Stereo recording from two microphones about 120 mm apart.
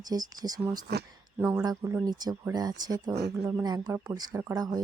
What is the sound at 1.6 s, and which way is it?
Speech, 30° right (ahead or behind).